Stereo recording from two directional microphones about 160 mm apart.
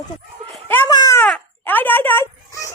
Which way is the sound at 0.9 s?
20° left (ahead or behind).